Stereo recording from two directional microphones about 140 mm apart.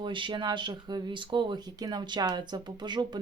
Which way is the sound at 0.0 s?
35° right (ahead or behind).